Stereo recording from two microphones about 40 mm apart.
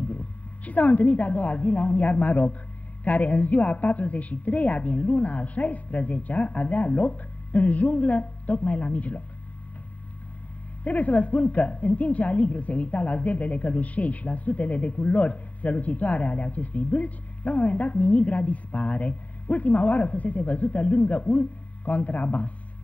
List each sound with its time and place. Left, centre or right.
0.1 s a woman's voice: left
10.8 s a woman's voice: left